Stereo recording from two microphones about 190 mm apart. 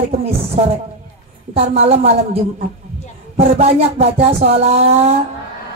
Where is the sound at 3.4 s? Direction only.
35° right (ahead or behind).